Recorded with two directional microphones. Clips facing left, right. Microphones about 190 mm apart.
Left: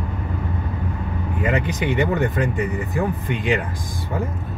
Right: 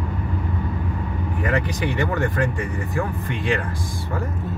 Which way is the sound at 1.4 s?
20° left (ahead or behind).